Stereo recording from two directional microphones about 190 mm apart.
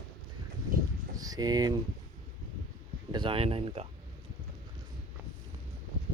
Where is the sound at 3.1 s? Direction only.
25° right (ahead or behind).